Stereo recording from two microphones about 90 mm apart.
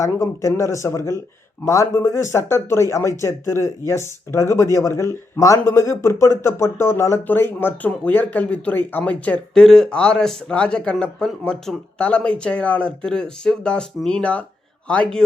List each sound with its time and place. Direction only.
0.0 s speech: 35° left (ahead or behind); by 15.2 s 10° left (ahead or behind)